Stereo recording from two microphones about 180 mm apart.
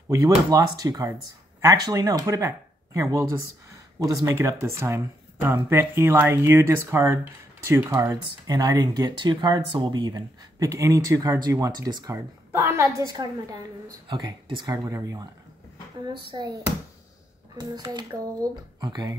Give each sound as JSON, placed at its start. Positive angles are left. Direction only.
{"t": 0.5, "sound": "speech", "side_deg": -20}
{"t": 17.6, "sound": "speech", "side_deg": -20}